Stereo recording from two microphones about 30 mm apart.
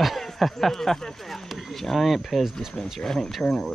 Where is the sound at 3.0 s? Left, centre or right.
Left.